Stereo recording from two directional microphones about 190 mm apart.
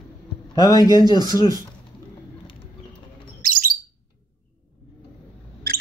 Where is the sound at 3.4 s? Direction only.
45° right (ahead or behind).